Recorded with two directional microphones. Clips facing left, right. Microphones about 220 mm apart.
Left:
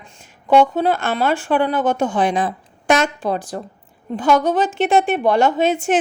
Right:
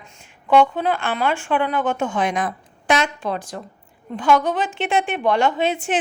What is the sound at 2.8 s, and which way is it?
A woman's voice, 45° left (ahead or behind).